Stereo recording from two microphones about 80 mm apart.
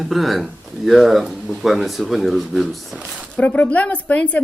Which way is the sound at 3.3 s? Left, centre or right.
Centre.